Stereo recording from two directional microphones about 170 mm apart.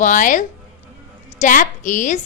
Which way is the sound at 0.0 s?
50° left (ahead or behind).